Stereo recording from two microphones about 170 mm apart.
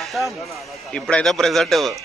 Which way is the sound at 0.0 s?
Centre (ahead or behind).